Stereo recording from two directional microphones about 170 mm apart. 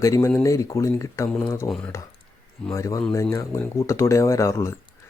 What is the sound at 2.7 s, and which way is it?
Speech, 20° left (ahead or behind).